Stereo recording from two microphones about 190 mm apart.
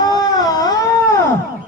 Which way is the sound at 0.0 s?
20° left (ahead or behind).